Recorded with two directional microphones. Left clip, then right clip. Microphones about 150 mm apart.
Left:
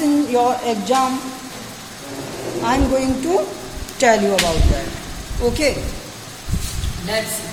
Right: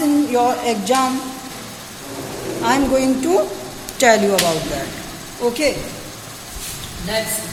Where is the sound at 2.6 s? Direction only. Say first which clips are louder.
Right 2 dB; 10° right (ahead or behind).